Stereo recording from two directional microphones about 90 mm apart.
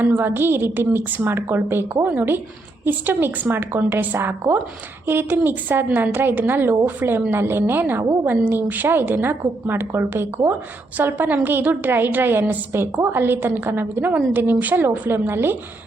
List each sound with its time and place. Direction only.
0.0 s a woman's voice: 20° right (ahead or behind)